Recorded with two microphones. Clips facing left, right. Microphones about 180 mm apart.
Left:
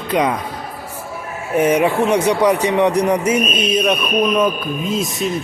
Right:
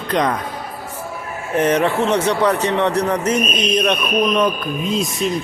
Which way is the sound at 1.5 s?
10° left (ahead or behind).